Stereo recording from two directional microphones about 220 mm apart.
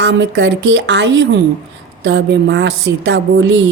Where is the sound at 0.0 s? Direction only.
55° right (ahead or behind).